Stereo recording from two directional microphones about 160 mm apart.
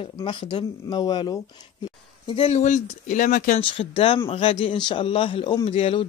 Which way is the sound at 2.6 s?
50° left (ahead or behind).